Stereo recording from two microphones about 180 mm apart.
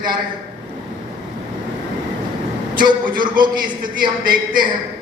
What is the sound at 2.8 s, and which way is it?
A man's voice, 25° right (ahead or behind).